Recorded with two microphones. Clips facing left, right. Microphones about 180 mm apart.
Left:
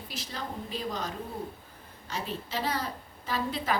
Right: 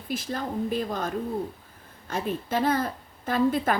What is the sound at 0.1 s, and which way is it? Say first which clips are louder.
A woman's voice: right 9 dB; 50° right (ahead or behind).